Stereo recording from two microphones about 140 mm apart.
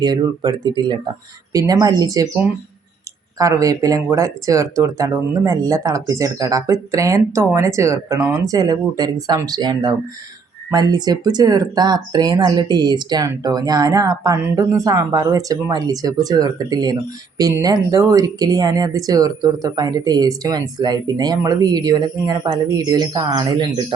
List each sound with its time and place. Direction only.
0.0 s speech: 30° right (ahead or behind)
3.3 s speech: 25° right (ahead or behind)